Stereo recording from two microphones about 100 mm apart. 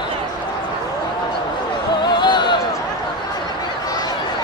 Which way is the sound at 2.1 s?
50° left (ahead or behind).